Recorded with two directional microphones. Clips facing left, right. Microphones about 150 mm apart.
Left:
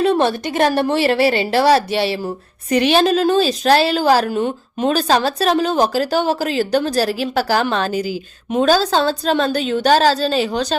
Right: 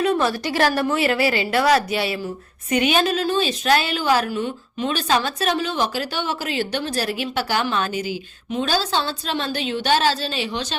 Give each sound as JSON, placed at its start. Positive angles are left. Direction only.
{"t": 0.0, "sound": "a woman's voice", "side_deg": 30}
{"t": 4.3, "sound": "speech", "side_deg": 50}